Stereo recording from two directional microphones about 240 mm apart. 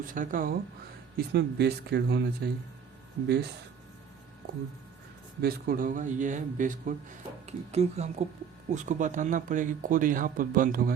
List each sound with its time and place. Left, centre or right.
0.0 s speech: right
5.4 s speech: right